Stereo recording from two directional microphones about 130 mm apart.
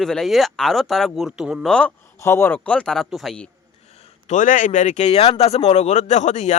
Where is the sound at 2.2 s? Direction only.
20° left (ahead or behind); by 3.5 s 5° left (ahead or behind).